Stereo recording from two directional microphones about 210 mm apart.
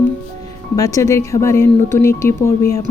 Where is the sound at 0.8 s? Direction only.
15° left (ahead or behind).